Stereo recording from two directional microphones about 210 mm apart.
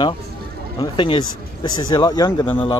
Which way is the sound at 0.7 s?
25° left (ahead or behind).